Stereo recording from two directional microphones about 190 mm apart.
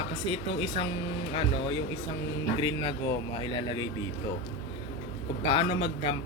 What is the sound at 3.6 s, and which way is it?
Speech, 25° left (ahead or behind).